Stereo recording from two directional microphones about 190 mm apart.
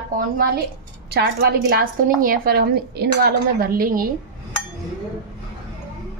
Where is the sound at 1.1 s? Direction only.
55° right (ahead or behind).